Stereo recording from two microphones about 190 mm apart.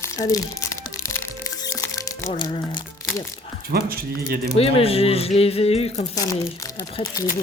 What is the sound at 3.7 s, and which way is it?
Speech, 50° right (ahead or behind).